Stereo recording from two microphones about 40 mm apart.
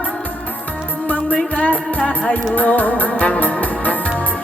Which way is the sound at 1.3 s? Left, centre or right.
Left.